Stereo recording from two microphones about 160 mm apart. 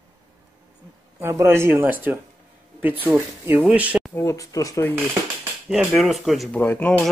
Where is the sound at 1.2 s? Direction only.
15° right (ahead or behind).